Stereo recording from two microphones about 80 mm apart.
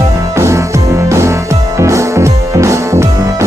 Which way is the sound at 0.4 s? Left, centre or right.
Right.